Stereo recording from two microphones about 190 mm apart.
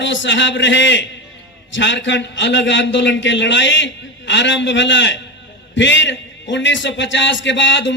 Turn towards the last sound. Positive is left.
turn(degrees=70)  # may be behind; listen again after turning